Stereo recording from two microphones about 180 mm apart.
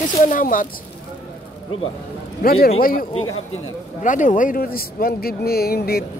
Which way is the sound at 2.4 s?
55° left (ahead or behind).